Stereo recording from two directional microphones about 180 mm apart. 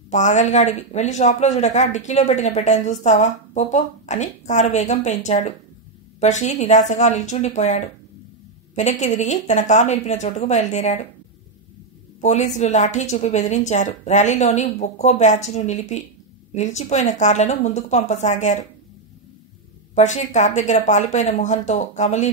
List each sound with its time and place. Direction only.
0.1 s speech: 40° left (ahead or behind)
12.2 s speech: 40° left (ahead or behind)
20.0 s speech: 40° left (ahead or behind)